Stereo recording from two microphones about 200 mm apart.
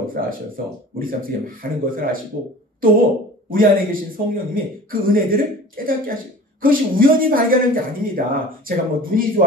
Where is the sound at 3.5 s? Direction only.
45° right (ahead or behind).